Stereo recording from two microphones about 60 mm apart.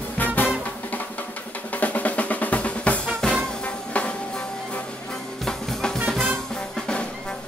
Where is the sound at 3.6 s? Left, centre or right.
Left.